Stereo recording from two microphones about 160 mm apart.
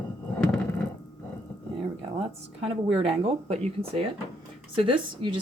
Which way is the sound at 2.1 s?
40° right (ahead or behind).